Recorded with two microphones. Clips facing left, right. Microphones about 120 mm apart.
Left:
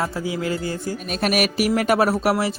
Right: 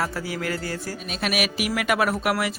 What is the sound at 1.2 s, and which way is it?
Speech, 45° left (ahead or behind).